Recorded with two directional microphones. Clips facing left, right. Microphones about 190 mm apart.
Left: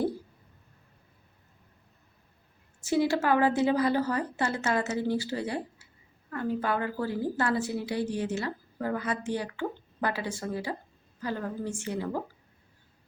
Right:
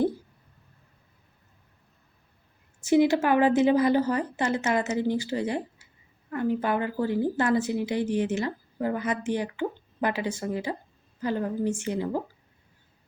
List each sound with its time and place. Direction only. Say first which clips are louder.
2.8 s a woman's voice: right 5 dB; 20° right (ahead or behind)